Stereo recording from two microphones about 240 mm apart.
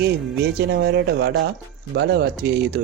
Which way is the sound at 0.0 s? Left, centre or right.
Right.